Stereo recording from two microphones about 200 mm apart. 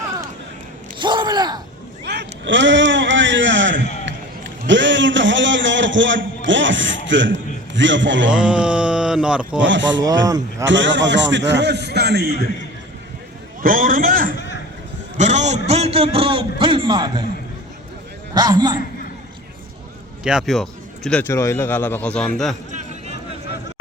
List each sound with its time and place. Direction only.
1.0 s speech: 20° right (ahead or behind)
2.0 s a sound: 60° right (ahead or behind)
4.0 s a man's voice: 65° right (ahead or behind)
8.3 s a sound: 5° right (ahead or behind)
9.6 s a man's voice: 65° right (ahead or behind)
10.2 s a man's voice: 20° right (ahead or behind)
10.7 s a man's voice: 65° right (ahead or behind)
13.6 s a man's voice: 45° right (ahead or behind); by 17.2 s 20° right (ahead or behind)
18.3 s a man's voice: 20° right (ahead or behind)
20.2 s a man's voice: centre (ahead or behind)
22.7 s a sound: 35° right (ahead or behind)